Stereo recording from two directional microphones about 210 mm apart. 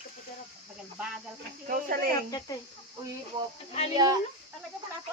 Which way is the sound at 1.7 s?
45° right (ahead or behind).